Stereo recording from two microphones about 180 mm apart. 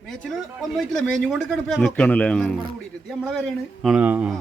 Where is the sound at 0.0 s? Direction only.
5° left (ahead or behind).